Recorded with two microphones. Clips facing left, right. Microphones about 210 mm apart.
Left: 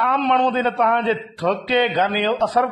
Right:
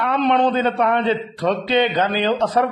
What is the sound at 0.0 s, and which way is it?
A man's voice, centre (ahead or behind).